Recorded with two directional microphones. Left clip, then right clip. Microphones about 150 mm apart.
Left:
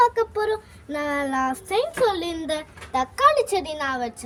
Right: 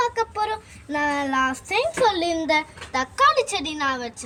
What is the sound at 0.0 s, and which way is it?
Child singing, 50° left (ahead or behind).